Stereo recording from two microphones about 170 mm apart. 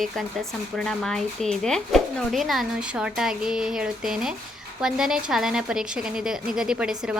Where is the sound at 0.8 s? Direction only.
Centre (ahead or behind).